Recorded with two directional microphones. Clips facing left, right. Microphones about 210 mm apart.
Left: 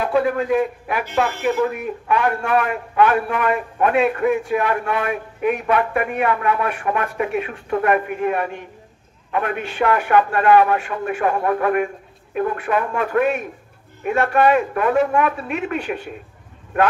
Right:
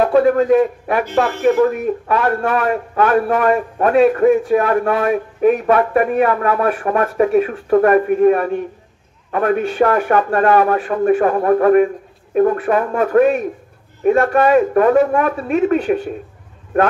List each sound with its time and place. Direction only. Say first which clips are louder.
0.0 s a man's voice: right 6 dB; 45° right (ahead or behind)